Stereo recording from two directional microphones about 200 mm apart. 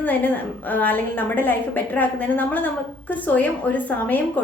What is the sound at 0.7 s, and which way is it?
A woman's voice, 10° left (ahead or behind).